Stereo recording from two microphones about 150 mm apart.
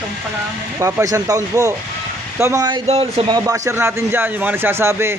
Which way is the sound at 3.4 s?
20° right (ahead or behind).